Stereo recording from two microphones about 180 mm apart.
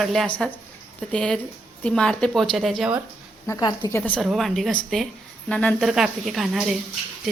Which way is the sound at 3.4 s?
20° left (ahead or behind).